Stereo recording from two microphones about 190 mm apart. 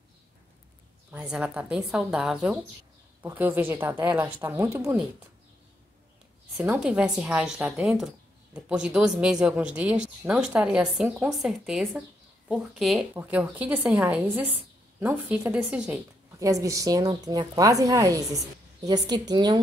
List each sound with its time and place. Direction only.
1.1 s a woman's voice: 5° right (ahead or behind)
6.5 s a woman's voice: 10° right (ahead or behind)
16.3 s a woman's voice: 15° right (ahead or behind)